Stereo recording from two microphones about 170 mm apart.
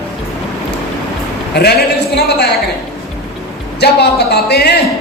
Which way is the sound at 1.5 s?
70° left (ahead or behind).